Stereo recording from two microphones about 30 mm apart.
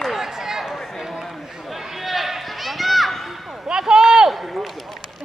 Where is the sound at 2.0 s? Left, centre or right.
Centre.